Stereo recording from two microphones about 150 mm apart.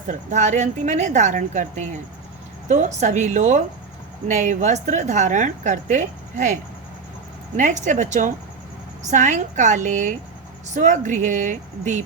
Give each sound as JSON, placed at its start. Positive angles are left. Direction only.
{"t": 0.1, "sound": "a woman's voice", "side_deg": -55}